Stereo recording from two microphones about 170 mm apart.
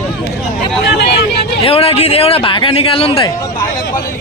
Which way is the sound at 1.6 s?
35° left (ahead or behind).